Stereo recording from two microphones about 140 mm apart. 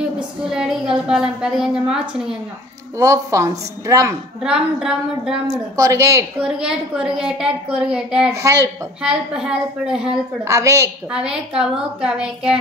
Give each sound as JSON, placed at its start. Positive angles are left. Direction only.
{"t": 0.5, "sound": "a woman's voice", "side_deg": -5}
{"t": 3.0, "sound": "speech", "side_deg": -20}
{"t": 4.4, "sound": "a woman's voice", "side_deg": -5}
{"t": 5.8, "sound": "speech", "side_deg": -20}
{"t": 6.4, "sound": "a woman's voice", "side_deg": -5}
{"t": 8.3, "sound": "speech", "side_deg": -20}
{"t": 9.0, "sound": "a woman's voice", "side_deg": -5}
{"t": 10.4, "sound": "speech", "side_deg": -20}
{"t": 11.1, "sound": "a woman's voice", "side_deg": -5}